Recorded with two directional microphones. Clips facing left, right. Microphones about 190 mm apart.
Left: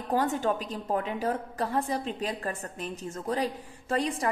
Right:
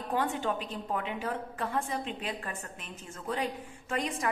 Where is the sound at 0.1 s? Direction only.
40° left (ahead or behind).